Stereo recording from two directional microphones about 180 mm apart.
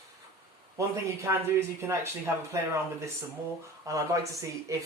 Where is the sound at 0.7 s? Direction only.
15° right (ahead or behind).